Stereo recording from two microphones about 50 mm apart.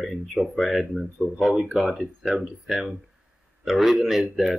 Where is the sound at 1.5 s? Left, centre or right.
Centre.